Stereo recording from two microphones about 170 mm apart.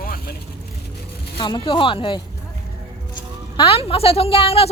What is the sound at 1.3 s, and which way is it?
Speech, 30° left (ahead or behind).